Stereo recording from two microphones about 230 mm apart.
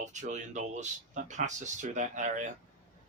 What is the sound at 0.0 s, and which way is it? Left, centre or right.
Speech, right.